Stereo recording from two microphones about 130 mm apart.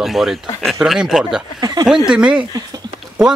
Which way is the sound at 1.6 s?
30° right (ahead or behind).